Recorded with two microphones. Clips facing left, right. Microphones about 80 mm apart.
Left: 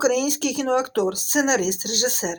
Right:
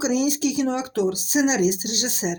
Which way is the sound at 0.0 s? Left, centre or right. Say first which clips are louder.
Left 1 dB; left.